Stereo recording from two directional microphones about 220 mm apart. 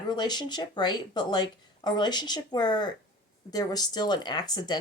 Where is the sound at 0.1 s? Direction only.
20° left (ahead or behind).